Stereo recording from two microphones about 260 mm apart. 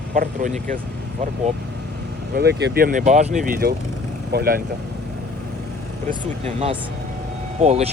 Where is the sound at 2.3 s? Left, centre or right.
Right.